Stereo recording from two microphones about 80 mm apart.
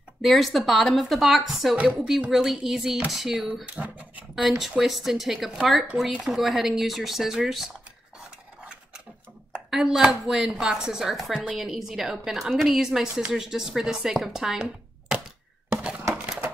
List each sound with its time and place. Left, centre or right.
0.2 s a woman's voice: centre
3.6 s speech: centre
4.5 s a woman's voice: centre
9.5 s a woman's voice: centre
15.7 s a sound: centre